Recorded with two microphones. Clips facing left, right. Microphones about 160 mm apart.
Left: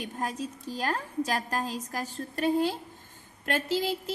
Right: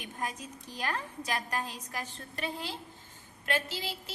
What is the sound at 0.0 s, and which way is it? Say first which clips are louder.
A woman's voice: left 5 dB; 35° left (ahead or behind).